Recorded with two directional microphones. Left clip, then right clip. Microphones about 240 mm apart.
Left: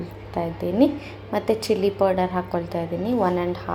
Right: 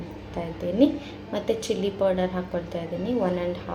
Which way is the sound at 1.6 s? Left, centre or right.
Left.